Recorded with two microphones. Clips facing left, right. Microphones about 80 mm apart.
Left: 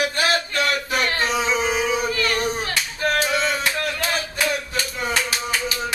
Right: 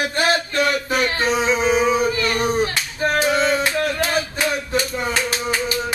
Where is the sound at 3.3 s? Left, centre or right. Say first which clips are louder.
Right 4 dB; right.